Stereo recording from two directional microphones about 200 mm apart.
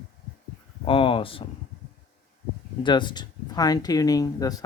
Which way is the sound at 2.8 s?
20° left (ahead or behind).